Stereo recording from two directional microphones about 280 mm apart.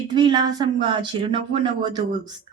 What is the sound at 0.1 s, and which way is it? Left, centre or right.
Speech, centre.